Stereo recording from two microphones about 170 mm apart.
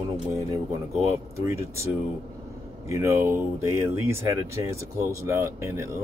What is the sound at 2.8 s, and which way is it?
Speech, 15° right (ahead or behind).